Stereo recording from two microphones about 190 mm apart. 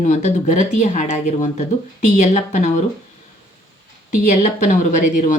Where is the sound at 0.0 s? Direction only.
40° left (ahead or behind).